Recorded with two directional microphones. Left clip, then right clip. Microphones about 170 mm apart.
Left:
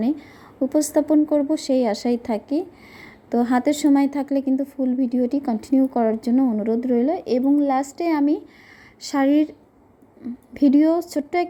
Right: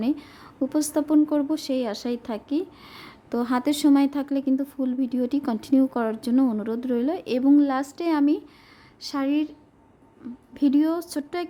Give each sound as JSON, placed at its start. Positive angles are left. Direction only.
{"t": 0.0, "sound": "a woman's voice", "side_deg": 5}
{"t": 9.0, "sound": "a woman's voice", "side_deg": 20}
{"t": 10.5, "sound": "speech", "side_deg": 10}